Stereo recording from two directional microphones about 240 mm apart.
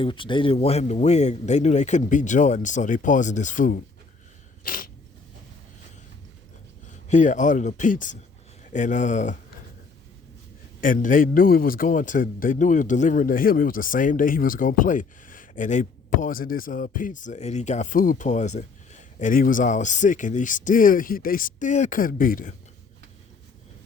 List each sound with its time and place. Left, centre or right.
0.0 s speech: left
4.6 s a sound: left
6.9 s a man's voice: left
10.8 s a man's voice: left